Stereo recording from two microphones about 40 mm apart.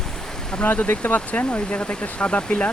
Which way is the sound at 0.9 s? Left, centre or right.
Left.